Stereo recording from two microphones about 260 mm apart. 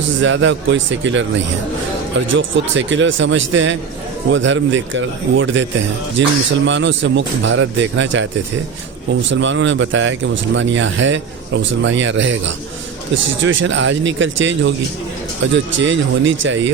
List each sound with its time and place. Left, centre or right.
0.2 s speech: right
2.3 s speech: right
9.3 s speech: right